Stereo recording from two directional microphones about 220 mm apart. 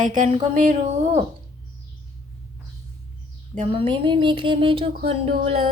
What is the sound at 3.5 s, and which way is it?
Speech, 25° right (ahead or behind).